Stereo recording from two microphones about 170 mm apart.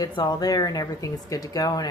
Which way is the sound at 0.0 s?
25° left (ahead or behind).